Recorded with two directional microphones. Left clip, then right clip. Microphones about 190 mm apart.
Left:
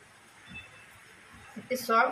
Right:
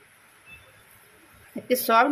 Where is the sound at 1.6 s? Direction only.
50° right (ahead or behind).